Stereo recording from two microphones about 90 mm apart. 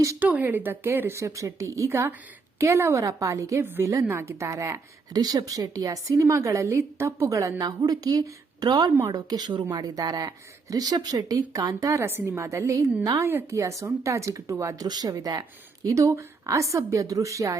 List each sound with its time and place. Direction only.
0.2 s speech: 15° right (ahead or behind); by 4.8 s 35° right (ahead or behind)
5.1 s speech: 45° right (ahead or behind)
7.6 s speech: 50° right (ahead or behind)
9.0 s speech: 40° right (ahead or behind)
14.8 s speech: 45° right (ahead or behind)